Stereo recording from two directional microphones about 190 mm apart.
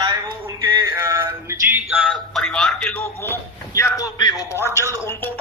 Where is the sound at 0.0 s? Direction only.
20° right (ahead or behind); by 3.3 s 10° left (ahead or behind).